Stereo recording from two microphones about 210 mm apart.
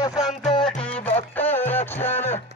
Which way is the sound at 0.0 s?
20° left (ahead or behind).